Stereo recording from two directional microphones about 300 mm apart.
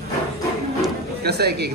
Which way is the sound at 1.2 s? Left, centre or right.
Right.